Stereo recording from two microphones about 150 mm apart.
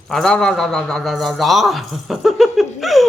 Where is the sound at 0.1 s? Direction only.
5° left (ahead or behind).